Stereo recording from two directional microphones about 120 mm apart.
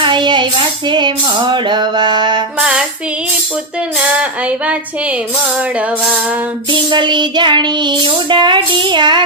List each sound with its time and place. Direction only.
0.0 s child singing: 40° right (ahead or behind)
2.6 s music: 5° right (ahead or behind)
4.2 s a sound: 10° right (ahead or behind)
6.7 s child singing: 40° right (ahead or behind)